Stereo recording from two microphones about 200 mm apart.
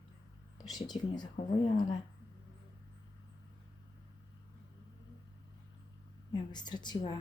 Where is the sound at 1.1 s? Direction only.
20° left (ahead or behind).